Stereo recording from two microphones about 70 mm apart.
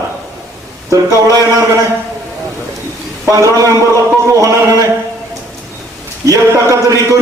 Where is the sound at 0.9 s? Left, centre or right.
Right.